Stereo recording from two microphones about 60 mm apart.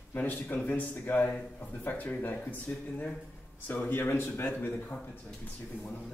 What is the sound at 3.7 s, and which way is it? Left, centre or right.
Speech, left.